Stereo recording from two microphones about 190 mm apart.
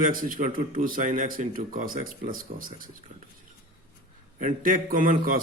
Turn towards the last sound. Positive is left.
turn(degrees=-45)  # may be behind; listen again after turning